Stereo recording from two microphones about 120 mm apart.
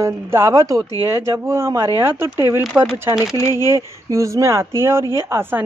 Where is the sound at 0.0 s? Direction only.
25° right (ahead or behind).